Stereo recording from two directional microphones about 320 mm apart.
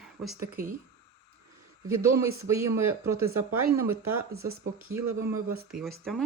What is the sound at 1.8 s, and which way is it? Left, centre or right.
Speech, centre.